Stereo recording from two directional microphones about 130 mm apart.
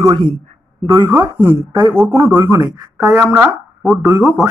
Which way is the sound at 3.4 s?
5° right (ahead or behind).